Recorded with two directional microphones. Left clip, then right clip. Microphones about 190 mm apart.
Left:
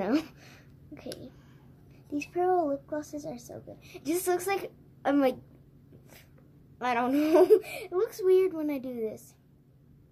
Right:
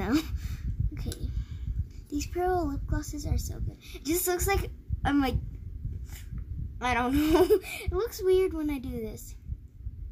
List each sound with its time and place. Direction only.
0.0 s a sound: 25° right (ahead or behind)
2.0 s a child's voice: 25° right (ahead or behind)
6.8 s a child's voice: 20° right (ahead or behind)